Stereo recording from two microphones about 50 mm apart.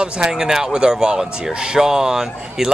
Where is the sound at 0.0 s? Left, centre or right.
Centre.